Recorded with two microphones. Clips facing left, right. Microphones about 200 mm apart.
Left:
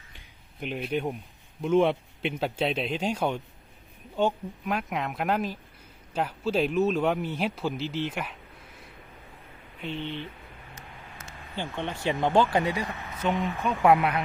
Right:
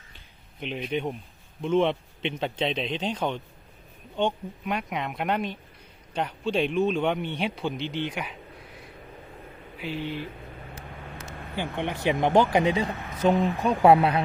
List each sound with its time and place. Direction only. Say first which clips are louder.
0.6 s a man's voice: even; 5° left (ahead or behind)
9.7 s speech: right 2 dB; 5° right (ahead or behind)
11.8 s speech: right 3 dB; 15° right (ahead or behind)
13.1 s speech: right 6 dB; 35° right (ahead or behind)